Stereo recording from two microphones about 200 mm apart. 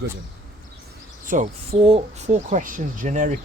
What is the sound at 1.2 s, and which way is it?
Speech, 40° right (ahead or behind).